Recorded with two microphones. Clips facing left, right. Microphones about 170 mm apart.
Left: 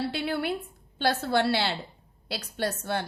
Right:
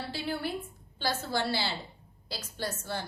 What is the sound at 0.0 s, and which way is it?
A woman's voice, 65° left (ahead or behind).